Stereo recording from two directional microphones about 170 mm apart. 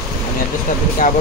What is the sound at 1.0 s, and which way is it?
Speech, 55° left (ahead or behind).